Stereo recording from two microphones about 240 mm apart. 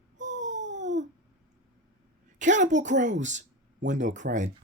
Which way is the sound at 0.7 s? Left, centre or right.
Right.